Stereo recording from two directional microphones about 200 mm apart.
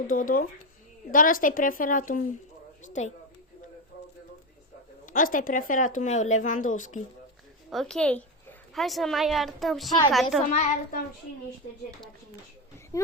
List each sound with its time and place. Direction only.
0.1 s a woman's voice: 45° left (ahead or behind)
5.0 s speech: 40° left (ahead or behind)
7.7 s a woman's voice: centre (ahead or behind)
10.5 s speech: 35° left (ahead or behind)
12.9 s speech: 20° left (ahead or behind)